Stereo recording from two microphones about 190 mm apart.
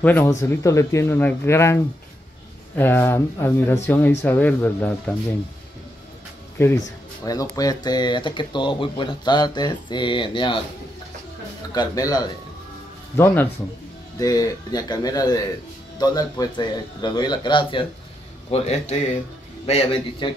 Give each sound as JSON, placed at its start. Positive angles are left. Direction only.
{"t": 0.0, "sound": "speech", "side_deg": 10}
{"t": 2.8, "sound": "speech", "side_deg": 10}
{"t": 7.2, "sound": "speech", "side_deg": 20}
{"t": 11.7, "sound": "a man's voice", "side_deg": 20}